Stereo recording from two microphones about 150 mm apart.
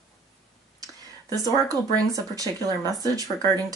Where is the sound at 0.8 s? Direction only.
25° right (ahead or behind).